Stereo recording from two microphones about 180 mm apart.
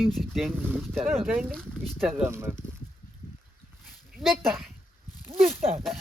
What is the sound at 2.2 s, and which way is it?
Speech, 15° right (ahead or behind).